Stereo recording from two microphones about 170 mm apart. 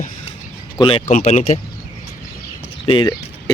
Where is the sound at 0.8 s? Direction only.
30° left (ahead or behind).